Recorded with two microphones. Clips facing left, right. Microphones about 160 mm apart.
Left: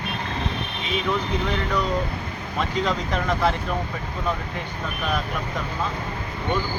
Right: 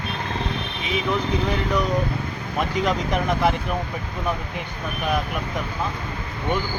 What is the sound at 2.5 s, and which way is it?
Speech, 15° right (ahead or behind).